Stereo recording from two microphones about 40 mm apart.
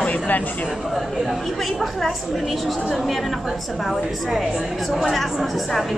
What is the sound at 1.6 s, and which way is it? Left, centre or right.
A woman's voice, centre.